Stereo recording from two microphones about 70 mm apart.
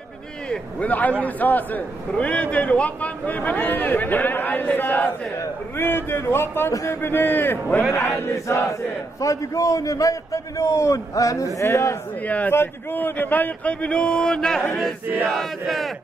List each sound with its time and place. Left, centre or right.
0.5 s a man's voice: left
7.9 s a man's voice: left
12.3 s a man's voice: left
15.3 s battle cry: centre